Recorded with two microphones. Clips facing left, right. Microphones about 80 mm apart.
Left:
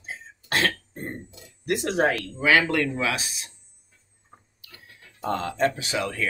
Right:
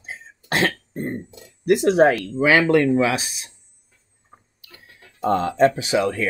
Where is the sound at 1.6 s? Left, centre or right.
Centre.